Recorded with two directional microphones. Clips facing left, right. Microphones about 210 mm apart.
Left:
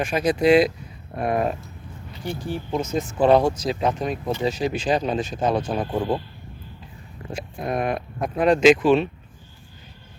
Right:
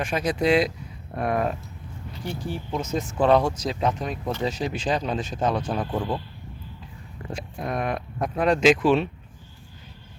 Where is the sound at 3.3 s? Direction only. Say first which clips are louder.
Left 3 dB; 35° left (ahead or behind).